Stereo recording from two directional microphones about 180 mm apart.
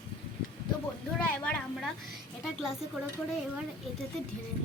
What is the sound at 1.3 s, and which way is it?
Speech, 5° left (ahead or behind).